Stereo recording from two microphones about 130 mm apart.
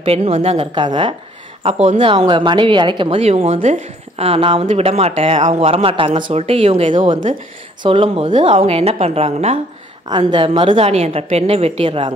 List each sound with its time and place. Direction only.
0.0 s a woman's voice: 50° right (ahead or behind)
0.7 s speech: 35° right (ahead or behind)
1.6 s speech: 50° right (ahead or behind)
3.6 s speech: 75° right (ahead or behind)
4.2 s a woman's voice: 50° right (ahead or behind)
10.0 s a woman's voice: 35° right (ahead or behind)